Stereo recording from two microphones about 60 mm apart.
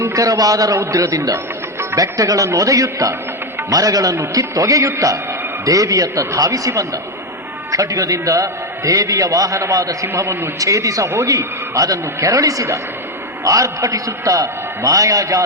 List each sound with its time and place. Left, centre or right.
0.1 s a man's voice: right
0.8 s a man's voice: right
3.7 s a man's voice: right
10.1 s a man's voice: right